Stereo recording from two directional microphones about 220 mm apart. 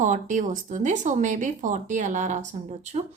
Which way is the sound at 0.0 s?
35° right (ahead or behind).